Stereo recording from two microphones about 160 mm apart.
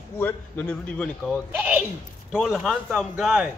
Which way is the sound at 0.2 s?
10° left (ahead or behind).